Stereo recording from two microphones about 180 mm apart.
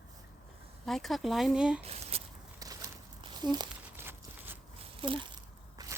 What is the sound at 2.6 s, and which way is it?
Crumpling, 20° right (ahead or behind).